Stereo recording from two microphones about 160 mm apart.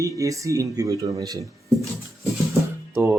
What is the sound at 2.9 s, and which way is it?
Music, 15° right (ahead or behind).